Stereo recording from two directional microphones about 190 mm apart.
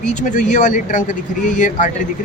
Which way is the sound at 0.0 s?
40° left (ahead or behind).